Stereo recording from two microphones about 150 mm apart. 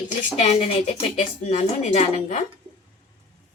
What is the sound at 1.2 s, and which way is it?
Speech, 45° left (ahead or behind).